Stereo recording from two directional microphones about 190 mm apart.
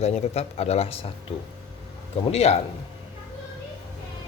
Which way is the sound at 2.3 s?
35° left (ahead or behind).